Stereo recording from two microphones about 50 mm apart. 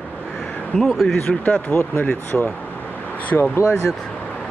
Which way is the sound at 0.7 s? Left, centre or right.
Centre.